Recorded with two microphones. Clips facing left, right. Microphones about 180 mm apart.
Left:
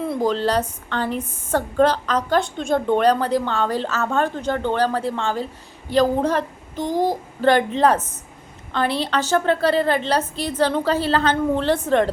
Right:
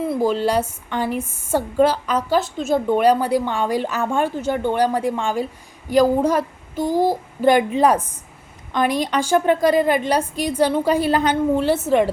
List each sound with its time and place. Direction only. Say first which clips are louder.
0.0 s a woman's voice: right 2 dB; 5° right (ahead or behind)